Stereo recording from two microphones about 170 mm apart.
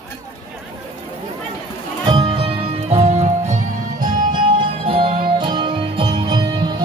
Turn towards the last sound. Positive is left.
turn(degrees=-25)  # may be behind; listen again after turning